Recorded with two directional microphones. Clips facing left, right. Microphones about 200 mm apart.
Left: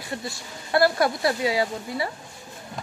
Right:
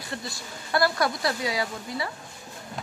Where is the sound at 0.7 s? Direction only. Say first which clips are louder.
Left 4 dB; 25° left (ahead or behind).